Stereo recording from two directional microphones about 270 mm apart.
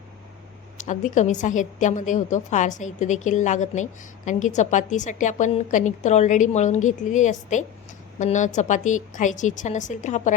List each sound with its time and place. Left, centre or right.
0.8 s a woman's voice: left